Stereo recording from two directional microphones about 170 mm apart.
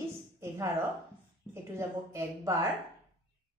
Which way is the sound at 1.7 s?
15° right (ahead or behind).